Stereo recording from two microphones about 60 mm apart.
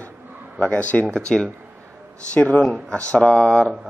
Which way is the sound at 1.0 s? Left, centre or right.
Centre.